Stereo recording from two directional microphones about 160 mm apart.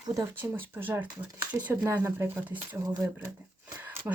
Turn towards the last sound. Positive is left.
turn(degrees=-10)  # may be behind; listen again after turning